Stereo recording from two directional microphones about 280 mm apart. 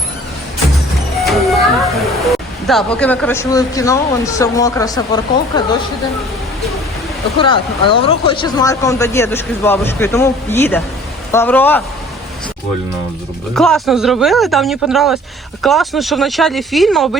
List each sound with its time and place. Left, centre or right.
1.2 s music: centre
2.2 s speech: centre
7.3 s speech: centre
13.6 s speech: centre